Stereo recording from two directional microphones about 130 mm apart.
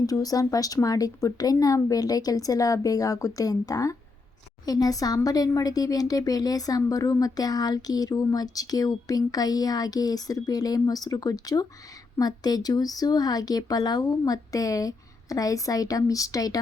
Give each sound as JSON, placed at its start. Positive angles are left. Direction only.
{"t": 0.0, "sound": "speech", "side_deg": 30}